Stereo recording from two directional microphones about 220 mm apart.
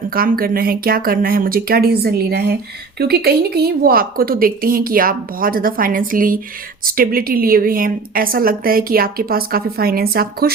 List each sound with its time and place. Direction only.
0.1 s a woman's voice: 40° right (ahead or behind)